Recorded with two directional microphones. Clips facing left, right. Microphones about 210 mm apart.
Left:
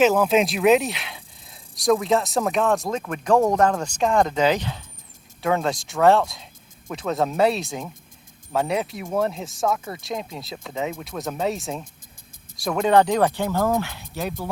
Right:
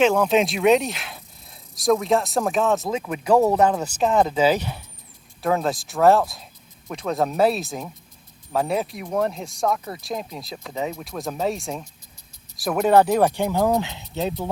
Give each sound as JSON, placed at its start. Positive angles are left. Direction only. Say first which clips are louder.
{"t": 0.0, "sound": "speech", "louder": "even", "side_deg": 5}